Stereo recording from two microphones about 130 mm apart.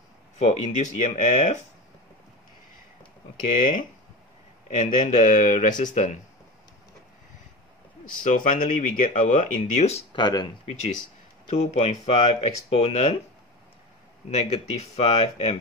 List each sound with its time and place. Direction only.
0.4 s speech: 65° left (ahead or behind)
4.6 s speech: 60° left (ahead or behind); by 6.0 s 80° left
8.2 s speech: 90° left; by 10.0 s 60° left (ahead or behind)
10.1 s speech: 35° left (ahead or behind)
11.4 s speech: 55° left (ahead or behind)
14.3 s speech: 55° left (ahead or behind)